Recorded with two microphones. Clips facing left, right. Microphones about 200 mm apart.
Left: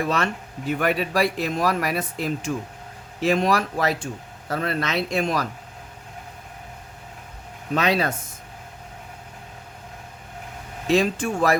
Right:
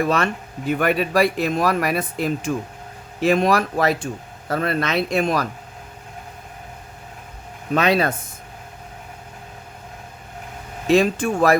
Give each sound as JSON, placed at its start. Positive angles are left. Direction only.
{"t": 0.0, "sound": "speech", "side_deg": -55}
{"t": 7.7, "sound": "speech", "side_deg": -55}
{"t": 10.8, "sound": "speech", "side_deg": -55}